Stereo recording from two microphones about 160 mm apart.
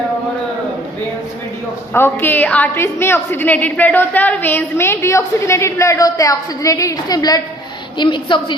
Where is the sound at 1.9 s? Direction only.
15° left (ahead or behind).